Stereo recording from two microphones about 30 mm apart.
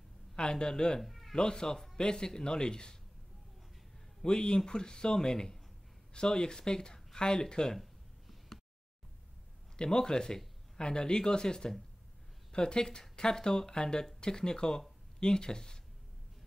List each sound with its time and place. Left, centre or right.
0.4 s speech: left
1.0 s cat: centre
1.3 s speech: left
4.2 s speech: left
7.6 s a sound: centre
9.8 s speech: left